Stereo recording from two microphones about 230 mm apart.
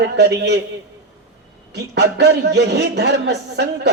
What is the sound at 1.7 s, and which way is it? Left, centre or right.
A man's voice, right.